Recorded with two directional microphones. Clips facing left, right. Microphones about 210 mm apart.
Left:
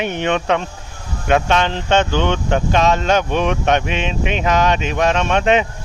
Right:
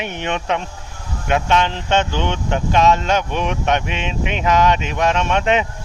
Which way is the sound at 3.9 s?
25° left (ahead or behind).